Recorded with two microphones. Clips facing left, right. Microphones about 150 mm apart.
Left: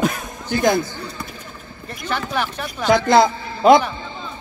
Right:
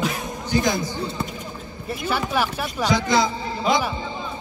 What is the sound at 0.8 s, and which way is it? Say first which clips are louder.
Speech: right 4 dB; 25° right (ahead or behind).